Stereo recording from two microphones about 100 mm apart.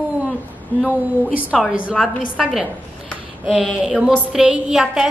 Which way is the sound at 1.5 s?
Centre (ahead or behind).